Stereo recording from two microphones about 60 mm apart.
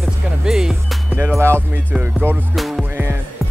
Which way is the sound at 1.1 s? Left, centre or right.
Right.